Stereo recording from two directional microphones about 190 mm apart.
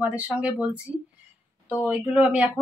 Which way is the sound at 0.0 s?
10° right (ahead or behind).